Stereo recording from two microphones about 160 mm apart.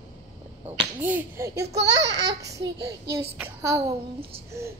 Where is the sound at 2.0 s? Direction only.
90° right.